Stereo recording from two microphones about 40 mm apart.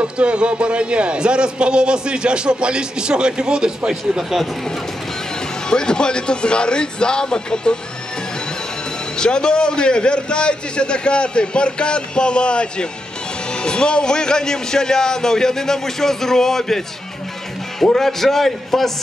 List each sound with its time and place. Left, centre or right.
0.0 s a man's voice: right
5.7 s a man's voice: centre
9.2 s a man's voice: left
17.9 s a man's voice: centre